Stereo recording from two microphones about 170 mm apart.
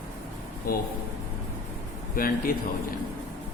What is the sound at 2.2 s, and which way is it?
Speech, 55° left (ahead or behind).